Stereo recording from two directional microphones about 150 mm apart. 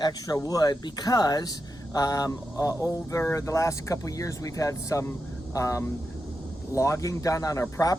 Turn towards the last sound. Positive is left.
turn(degrees=20)  # may be behind; listen again after turning